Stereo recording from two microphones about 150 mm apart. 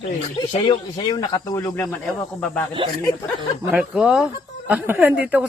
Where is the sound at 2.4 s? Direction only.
10° left (ahead or behind).